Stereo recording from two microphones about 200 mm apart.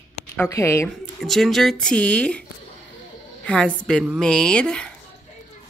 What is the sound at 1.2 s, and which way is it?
Speech, centre (ahead or behind).